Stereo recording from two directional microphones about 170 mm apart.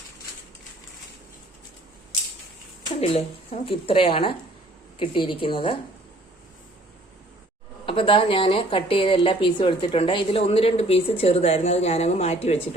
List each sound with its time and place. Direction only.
3.0 s a woman's voice: 40° left (ahead or behind)
7.9 s a woman's voice: 30° left (ahead or behind)